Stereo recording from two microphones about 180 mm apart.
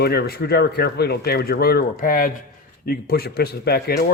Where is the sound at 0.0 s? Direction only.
60° left (ahead or behind).